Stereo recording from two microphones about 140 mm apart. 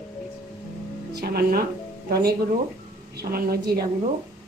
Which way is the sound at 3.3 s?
90° right.